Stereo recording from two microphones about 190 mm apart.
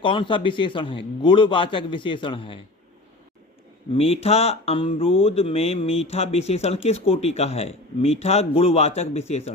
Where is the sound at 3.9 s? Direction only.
30° left (ahead or behind).